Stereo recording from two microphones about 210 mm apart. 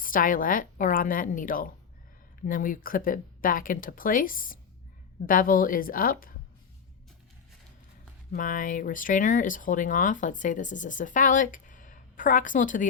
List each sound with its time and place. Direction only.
0.0 s a woman's voice: 40° left (ahead or behind)
8.3 s speech: 40° left (ahead or behind)